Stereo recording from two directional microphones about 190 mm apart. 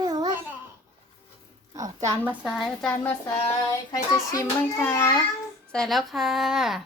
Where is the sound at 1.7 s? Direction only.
15° right (ahead or behind).